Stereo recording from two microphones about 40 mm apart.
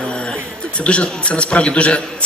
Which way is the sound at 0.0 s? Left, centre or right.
Left.